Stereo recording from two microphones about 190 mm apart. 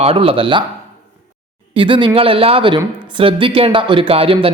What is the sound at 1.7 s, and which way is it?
A man's voice, 25° right (ahead or behind).